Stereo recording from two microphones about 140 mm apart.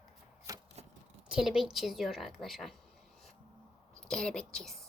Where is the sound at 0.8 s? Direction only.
50° right (ahead or behind).